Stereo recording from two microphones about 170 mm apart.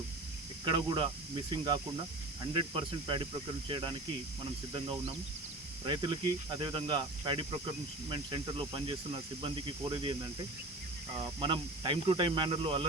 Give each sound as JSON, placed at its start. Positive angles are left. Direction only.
{"t": 0.6, "sound": "speech", "side_deg": -25}
{"t": 5.8, "sound": "speech", "side_deg": -25}
{"t": 11.2, "sound": "speech", "side_deg": -30}